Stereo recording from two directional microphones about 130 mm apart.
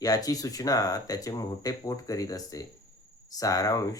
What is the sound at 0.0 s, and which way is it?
Speech, 30° left (ahead or behind).